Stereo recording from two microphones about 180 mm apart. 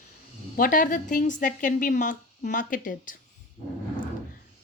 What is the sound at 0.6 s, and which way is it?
A woman's voice, 50° left (ahead or behind).